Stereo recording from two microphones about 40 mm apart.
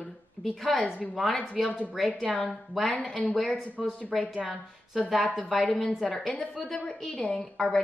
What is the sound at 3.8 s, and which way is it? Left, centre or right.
Speech, centre.